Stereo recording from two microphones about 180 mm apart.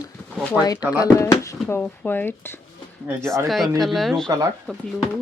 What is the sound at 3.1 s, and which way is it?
Speech, 10° right (ahead or behind).